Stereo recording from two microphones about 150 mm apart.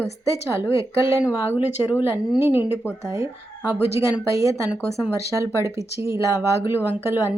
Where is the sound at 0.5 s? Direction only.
15° right (ahead or behind).